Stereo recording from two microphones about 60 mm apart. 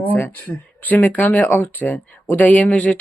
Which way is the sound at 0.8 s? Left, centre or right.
Left.